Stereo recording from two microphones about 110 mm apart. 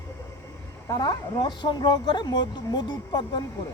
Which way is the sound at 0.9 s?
40° left (ahead or behind).